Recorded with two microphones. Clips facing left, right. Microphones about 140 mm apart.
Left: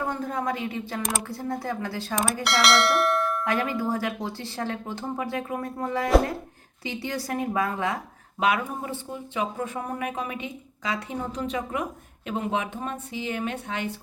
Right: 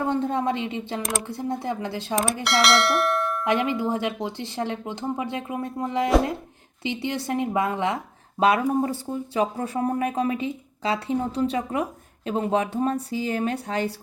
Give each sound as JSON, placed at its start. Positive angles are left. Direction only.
{"t": 0.0, "sound": "a woman's voice", "side_deg": -25}
{"t": 2.1, "sound": "bell", "side_deg": 0}
{"t": 3.4, "sound": "speech", "side_deg": -20}
{"t": 8.4, "sound": "speech", "side_deg": -35}